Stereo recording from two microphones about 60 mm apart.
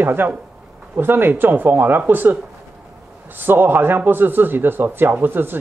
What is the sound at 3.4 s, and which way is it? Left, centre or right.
Speech, right.